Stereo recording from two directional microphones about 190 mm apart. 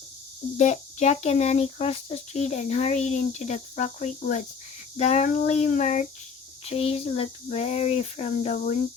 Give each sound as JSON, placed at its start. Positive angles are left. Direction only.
{"t": 0.5, "sound": "speech", "side_deg": 35}